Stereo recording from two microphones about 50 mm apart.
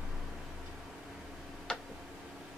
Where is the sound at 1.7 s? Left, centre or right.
Centre.